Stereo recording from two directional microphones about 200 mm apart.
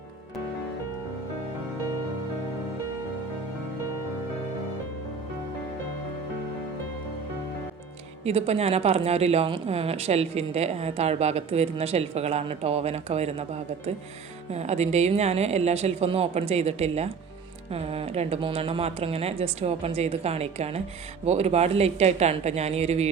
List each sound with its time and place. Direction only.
8.2 s speech: 30° right (ahead or behind)